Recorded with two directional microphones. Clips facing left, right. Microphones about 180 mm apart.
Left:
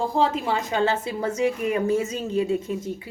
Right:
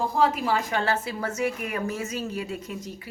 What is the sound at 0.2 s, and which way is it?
A woman's voice, 25° left (ahead or behind).